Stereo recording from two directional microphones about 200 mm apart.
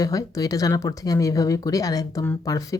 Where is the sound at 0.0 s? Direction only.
15° left (ahead or behind).